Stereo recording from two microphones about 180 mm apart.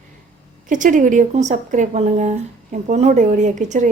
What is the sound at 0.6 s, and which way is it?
A woman's voice, 45° right (ahead or behind).